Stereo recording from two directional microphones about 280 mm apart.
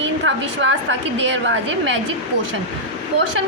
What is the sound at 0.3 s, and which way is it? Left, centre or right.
A woman's voice, right.